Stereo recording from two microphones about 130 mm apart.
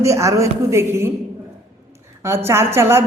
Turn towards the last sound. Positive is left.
turn(degrees=-20)  # may be behind; listen again after turning